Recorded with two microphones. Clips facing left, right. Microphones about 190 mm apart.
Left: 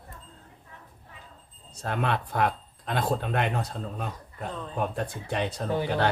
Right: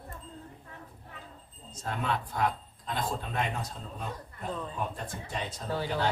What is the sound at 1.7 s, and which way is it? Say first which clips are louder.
Speech: left 4 dB; 70° left (ahead or behind).